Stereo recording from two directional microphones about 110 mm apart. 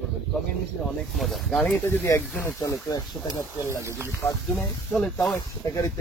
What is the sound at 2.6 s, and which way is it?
Speech, 35° left (ahead or behind).